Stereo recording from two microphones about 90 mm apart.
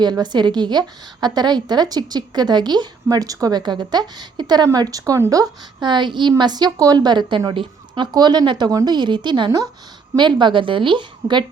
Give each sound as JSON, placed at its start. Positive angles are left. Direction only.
{"t": 0.0, "sound": "a woman's voice", "side_deg": -50}
{"t": 6.3, "sound": "a woman's voice", "side_deg": -50}